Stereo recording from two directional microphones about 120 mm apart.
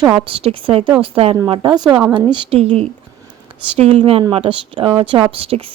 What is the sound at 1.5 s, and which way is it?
Speech, 40° right (ahead or behind).